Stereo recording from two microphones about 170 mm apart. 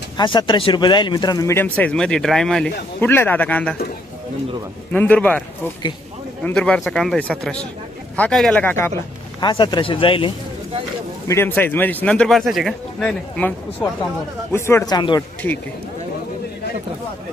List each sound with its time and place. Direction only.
0.2 s speech: 25° left (ahead or behind); by 3.8 s 10° left (ahead or behind)
4.9 s speech: 10° left (ahead or behind)
9.4 s speech: 25° left (ahead or behind)
11.3 s speech: 10° left (ahead or behind)
14.5 s speech: 15° left (ahead or behind)